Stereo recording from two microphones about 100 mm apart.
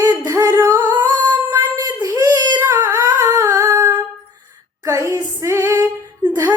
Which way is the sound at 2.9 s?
35° right (ahead or behind).